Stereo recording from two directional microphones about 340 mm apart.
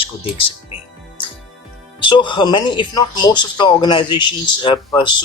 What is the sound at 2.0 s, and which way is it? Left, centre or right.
Speech, centre.